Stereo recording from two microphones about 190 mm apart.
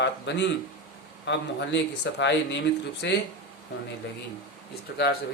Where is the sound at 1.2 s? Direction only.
65° left (ahead or behind).